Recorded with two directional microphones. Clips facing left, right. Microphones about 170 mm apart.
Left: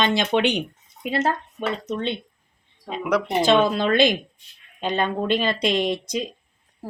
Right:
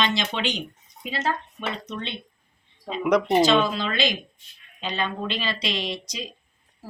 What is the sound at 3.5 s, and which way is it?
Speech, 55° left (ahead or behind).